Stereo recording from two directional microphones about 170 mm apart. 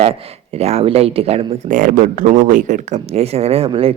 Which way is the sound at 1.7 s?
55° right (ahead or behind).